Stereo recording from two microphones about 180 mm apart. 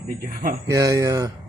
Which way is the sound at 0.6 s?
20° right (ahead or behind).